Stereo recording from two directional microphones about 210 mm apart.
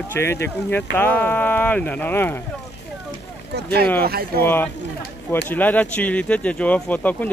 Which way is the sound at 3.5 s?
50° right (ahead or behind).